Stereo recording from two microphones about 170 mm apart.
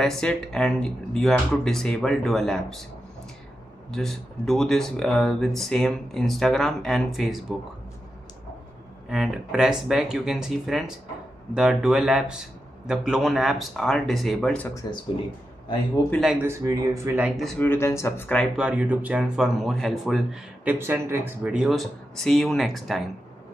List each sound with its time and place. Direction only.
0.0 s speech: 5° left (ahead or behind)
3.9 s speech: centre (ahead or behind)
9.1 s speech: 5° right (ahead or behind)
14.7 s speech: 20° left (ahead or behind)
16.4 s speech: 15° right (ahead or behind)
17.4 s speech: 5° left (ahead or behind)
17.6 s speech: 15° left (ahead or behind)
18.4 s speech: 5° right (ahead or behind)
20.7 s speech: 15° right (ahead or behind)